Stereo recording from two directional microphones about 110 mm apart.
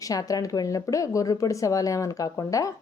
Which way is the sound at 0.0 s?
30° left (ahead or behind).